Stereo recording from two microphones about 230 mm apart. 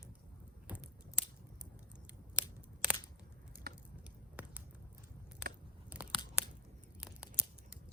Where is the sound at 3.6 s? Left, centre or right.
Right.